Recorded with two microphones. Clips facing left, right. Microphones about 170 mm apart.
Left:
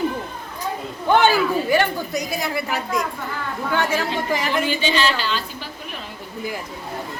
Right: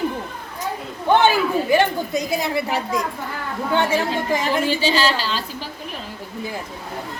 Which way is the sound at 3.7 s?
25° right (ahead or behind).